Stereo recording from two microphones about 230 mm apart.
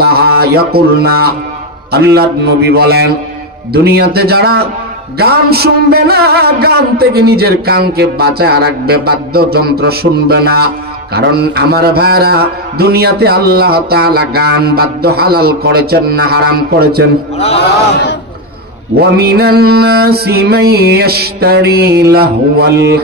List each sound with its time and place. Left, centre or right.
0.0 s a sound: right
1.9 s mantra: right
17.4 s a man's voice: left
18.9 s mantra: right